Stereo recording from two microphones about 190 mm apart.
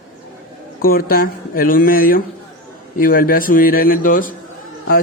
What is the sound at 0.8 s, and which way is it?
Speech, 50° left (ahead or behind).